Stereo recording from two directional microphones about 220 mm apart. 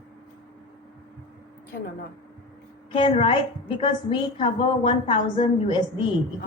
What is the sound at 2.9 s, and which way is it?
A woman's voice, 25° left (ahead or behind).